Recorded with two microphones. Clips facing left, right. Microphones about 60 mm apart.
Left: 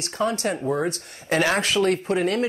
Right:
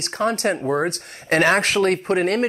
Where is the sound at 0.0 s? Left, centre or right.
Right.